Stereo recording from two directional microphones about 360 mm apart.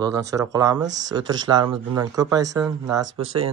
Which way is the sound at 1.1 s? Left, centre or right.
Centre.